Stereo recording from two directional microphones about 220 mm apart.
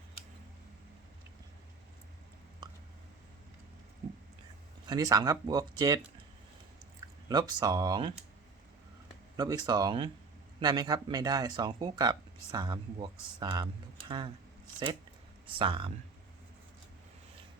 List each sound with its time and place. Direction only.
4.9 s speech: 15° right (ahead or behind)
7.3 s speech: 15° right (ahead or behind)
9.3 s speech: 15° right (ahead or behind)
15.4 s speech: 25° right (ahead or behind)